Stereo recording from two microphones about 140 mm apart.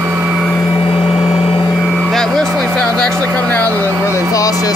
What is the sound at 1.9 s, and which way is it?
Vehicle, centre (ahead or behind).